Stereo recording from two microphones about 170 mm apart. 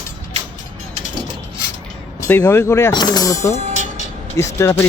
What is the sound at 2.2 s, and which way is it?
Speech, 15° left (ahead or behind).